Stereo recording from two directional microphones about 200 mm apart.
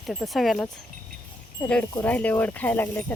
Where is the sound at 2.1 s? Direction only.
10° left (ahead or behind).